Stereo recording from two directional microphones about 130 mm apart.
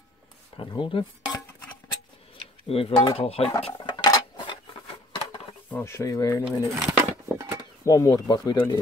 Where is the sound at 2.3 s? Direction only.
45° left (ahead or behind).